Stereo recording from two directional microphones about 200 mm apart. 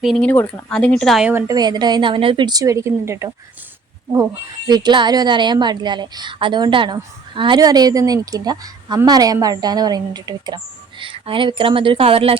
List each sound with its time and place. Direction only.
0.0 s speech: 5° left (ahead or behind)
1.3 s a woman's voice: 15° right (ahead or behind)
4.7 s a woman's voice: 20° right (ahead or behind)